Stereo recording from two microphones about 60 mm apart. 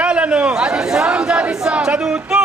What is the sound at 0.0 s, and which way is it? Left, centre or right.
Chatter, centre.